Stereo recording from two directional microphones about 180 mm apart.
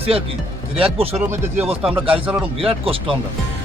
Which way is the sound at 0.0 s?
30° right (ahead or behind).